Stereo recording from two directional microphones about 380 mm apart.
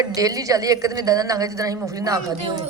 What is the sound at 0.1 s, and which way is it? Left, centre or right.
A woman's voice, centre.